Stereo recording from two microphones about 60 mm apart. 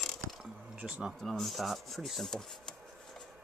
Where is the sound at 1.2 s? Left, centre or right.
Centre.